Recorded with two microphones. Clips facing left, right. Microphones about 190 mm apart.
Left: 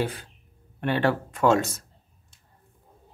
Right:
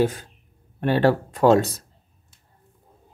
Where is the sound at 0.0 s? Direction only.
45° right (ahead or behind).